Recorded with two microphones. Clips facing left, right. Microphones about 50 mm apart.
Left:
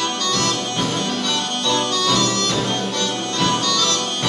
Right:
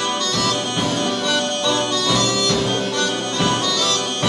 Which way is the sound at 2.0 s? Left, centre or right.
Centre.